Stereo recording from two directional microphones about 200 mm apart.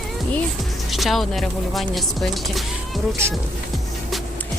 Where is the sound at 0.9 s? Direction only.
Centre (ahead or behind).